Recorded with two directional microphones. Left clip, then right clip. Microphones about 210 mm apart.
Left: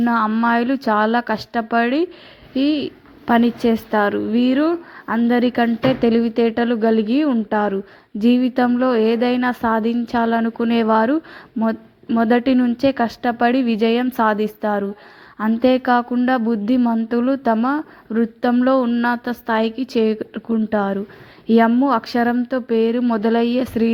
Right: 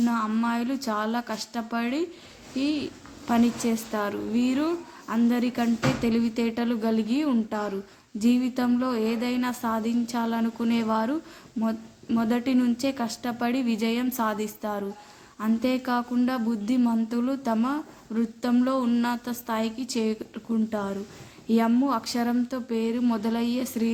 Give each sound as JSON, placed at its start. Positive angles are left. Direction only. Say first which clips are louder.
{"t": 0.0, "sound": "speech", "louder": "left 9 dB", "side_deg": 25}